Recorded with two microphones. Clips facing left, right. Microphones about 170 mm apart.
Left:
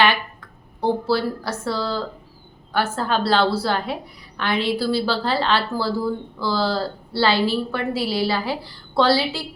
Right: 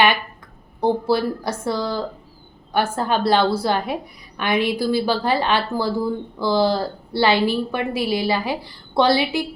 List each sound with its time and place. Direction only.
0.8 s a woman's voice: 15° right (ahead or behind)